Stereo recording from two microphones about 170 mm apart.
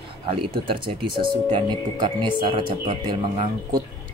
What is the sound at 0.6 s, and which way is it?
Speech, 30° right (ahead or behind).